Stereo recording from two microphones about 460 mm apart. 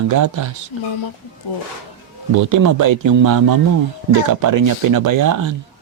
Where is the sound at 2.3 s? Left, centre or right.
Right.